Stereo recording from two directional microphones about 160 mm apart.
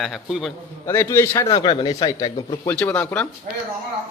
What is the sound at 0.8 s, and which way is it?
Speech, 15° left (ahead or behind).